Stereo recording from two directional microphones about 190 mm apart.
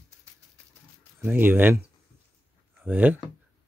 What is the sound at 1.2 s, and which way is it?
Speech, 10° right (ahead or behind).